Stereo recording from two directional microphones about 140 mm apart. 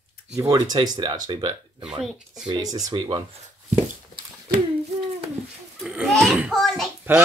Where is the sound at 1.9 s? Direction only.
5° right (ahead or behind).